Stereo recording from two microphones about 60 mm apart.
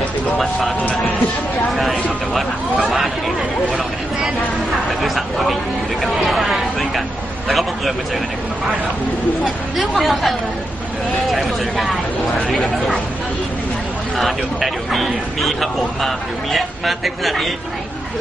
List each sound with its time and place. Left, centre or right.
0.4 s speech: centre
1.7 s a sound: centre
2.3 s chatter: centre
5.0 s a sound: centre
7.4 s speech: centre
9.4 s speech: centre
14.1 s speech: centre